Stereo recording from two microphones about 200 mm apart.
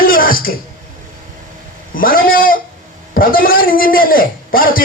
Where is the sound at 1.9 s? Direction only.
45° left (ahead or behind).